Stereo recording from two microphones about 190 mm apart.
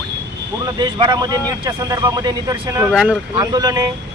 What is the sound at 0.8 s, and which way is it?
Speech, 25° right (ahead or behind).